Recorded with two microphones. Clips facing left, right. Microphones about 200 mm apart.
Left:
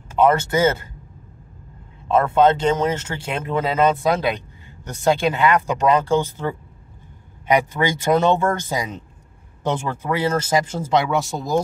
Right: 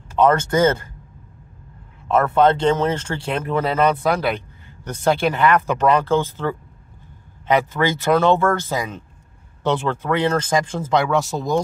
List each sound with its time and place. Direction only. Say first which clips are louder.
0.1 s speech: right 1 dB; 10° left (ahead or behind)
2.0 s speech: even; 15° left (ahead or behind)